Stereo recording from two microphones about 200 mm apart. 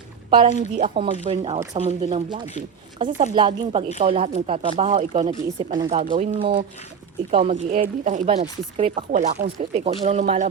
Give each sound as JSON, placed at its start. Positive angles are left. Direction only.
{"t": 0.4, "sound": "speech", "side_deg": -35}
{"t": 5.9, "sound": "speech", "side_deg": -35}